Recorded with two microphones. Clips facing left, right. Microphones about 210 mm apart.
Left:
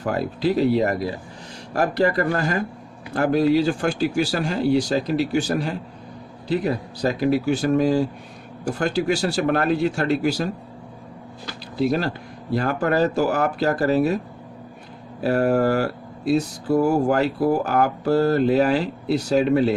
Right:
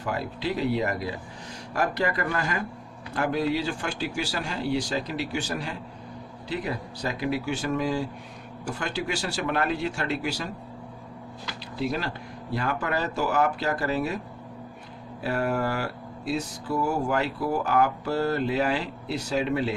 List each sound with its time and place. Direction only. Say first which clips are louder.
0.0 s speech: left 7 dB; 45° left (ahead or behind)
15.2 s speech: left 8 dB; 40° left (ahead or behind)